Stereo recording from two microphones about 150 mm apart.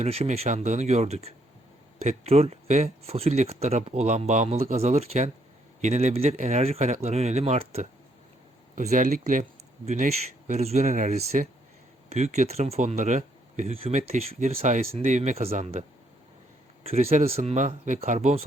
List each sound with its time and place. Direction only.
0.0 s speech: 45° right (ahead or behind)
16.8 s speech: 45° right (ahead or behind)